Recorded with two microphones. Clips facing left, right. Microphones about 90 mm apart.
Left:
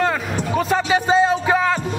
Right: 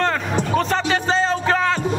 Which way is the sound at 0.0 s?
5° left (ahead or behind).